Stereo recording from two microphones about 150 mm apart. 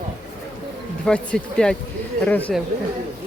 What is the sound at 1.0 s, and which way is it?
Speech, 5° left (ahead or behind).